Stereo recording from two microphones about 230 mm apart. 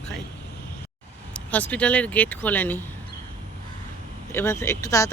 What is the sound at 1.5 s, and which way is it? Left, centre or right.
Speech, centre.